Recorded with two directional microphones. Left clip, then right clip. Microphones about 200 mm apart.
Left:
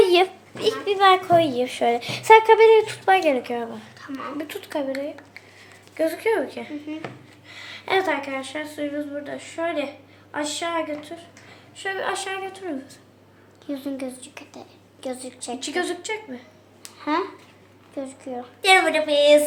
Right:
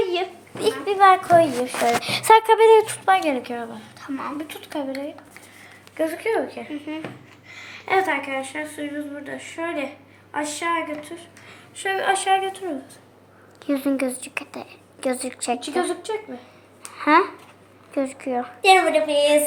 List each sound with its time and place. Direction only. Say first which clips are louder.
0.0 s a sound: left 7 dB; 20° left (ahead or behind)
0.6 s a child's voice: right 2 dB; 5° left (ahead or behind); by 3.0 s 10° right (ahead or behind)
3.1 s speech: left 3 dB; 10° left (ahead or behind)
4.0 s speech: right 4 dB; 5° right (ahead or behind)
4.4 s speech: left 2 dB; 15° left (ahead or behind)
6.0 s speech: left 1 dB; 5° left (ahead or behind)
6.9 s speech: right 2 dB; 45° right (ahead or behind)
7.5 s a woman's voice: right 1 dB; 10° left (ahead or behind)
11.9 s a woman's voice: right 9 dB; 20° left (ahead or behind)
13.7 s a woman's voice: right 7 dB; 35° right (ahead or behind)
15.6 s a woman's voice: right 2 dB; 35° left (ahead or behind)
16.9 s a woman's voice: right 8 dB; 30° right (ahead or behind)
18.6 s a woman's voice: right 1 dB; 35° left (ahead or behind)